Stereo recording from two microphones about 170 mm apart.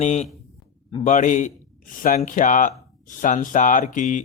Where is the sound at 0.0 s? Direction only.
45° left (ahead or behind).